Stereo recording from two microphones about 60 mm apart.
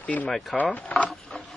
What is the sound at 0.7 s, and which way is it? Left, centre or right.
Speech, left.